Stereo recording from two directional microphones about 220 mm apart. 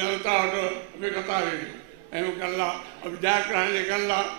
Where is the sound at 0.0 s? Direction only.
15° right (ahead or behind).